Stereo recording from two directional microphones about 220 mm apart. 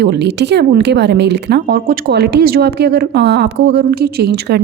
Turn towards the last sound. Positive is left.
turn(degrees=-45)  # may be behind; listen again after turning